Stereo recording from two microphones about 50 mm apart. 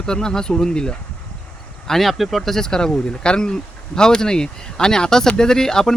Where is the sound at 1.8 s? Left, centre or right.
Centre.